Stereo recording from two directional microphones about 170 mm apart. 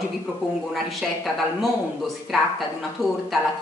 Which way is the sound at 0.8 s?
Centre (ahead or behind).